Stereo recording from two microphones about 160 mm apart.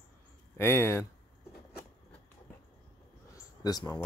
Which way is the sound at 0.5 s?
15° left (ahead or behind).